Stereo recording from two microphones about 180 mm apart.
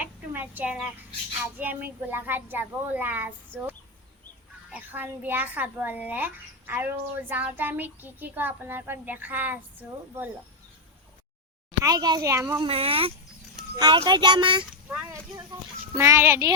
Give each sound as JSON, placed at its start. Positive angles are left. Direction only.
{"t": 0.0, "sound": "a sound", "side_deg": -10}
{"t": 1.5, "sound": "a child's voice", "side_deg": -10}
{"t": 4.7, "sound": "a child's voice", "side_deg": -10}
{"t": 11.9, "sound": "a child's voice", "side_deg": -20}
{"t": 12.6, "sound": "a child's voice", "side_deg": -30}
{"t": 14.8, "sound": "a child's voice", "side_deg": -10}